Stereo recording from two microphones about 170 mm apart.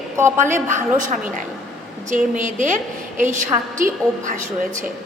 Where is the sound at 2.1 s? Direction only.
45° right (ahead or behind).